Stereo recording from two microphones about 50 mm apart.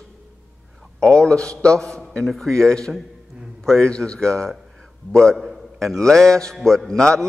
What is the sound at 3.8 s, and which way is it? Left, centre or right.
Speech, centre.